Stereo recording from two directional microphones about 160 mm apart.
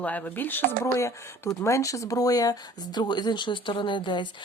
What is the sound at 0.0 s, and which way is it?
Speech, 10° left (ahead or behind).